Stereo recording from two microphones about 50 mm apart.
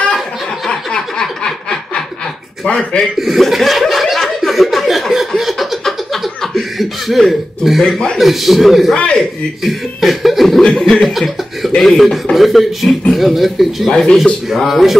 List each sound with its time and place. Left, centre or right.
0.7 s a sound: centre
1.2 s snicker: centre
2.7 s speech: left
3.2 s chuckle: centre
5.4 s a sound: centre
6.4 s chuckle: centre
8.2 s speech: centre
8.9 s speech: left
9.6 s chuckle: centre
10.7 s chuckle: centre
11.0 s cough: centre
11.8 s speech: centre